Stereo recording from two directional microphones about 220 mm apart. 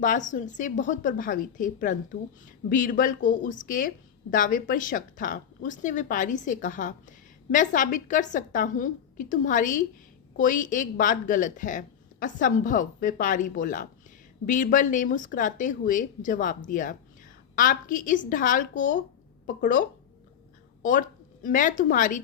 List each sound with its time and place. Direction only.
0.0 s speech: 35° left (ahead or behind)
21.4 s speech: 35° left (ahead or behind)